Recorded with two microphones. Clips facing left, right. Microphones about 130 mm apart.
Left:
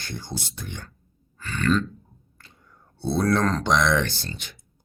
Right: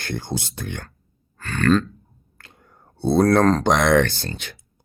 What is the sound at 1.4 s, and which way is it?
Grunt, 55° right (ahead or behind).